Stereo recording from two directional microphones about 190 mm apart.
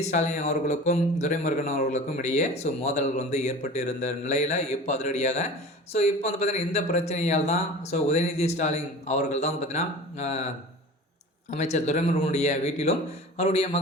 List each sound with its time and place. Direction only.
0.0 s a man's voice: 40° left (ahead or behind)
11.5 s a man's voice: 35° left (ahead or behind)